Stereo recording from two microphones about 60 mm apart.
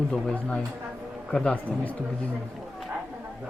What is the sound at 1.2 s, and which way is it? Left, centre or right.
Speech, centre.